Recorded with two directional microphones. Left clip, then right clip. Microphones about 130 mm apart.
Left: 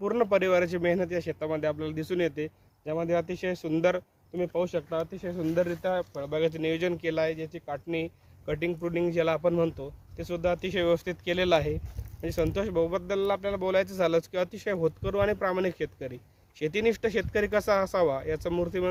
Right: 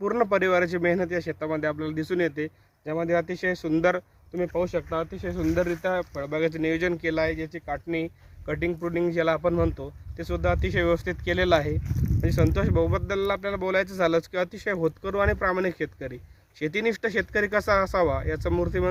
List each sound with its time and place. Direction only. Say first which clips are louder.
0.0 s speech: right 2 dB; 20° left (ahead or behind)
12.2 s speech: right 2 dB; 10° left (ahead or behind)